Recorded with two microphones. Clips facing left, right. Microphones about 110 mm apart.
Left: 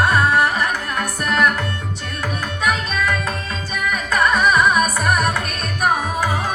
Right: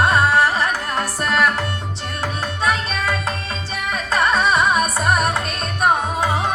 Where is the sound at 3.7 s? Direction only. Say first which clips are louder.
Left 1 dB; 30° right (ahead or behind).